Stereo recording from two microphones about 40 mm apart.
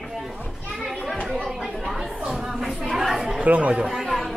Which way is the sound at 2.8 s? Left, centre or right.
Centre.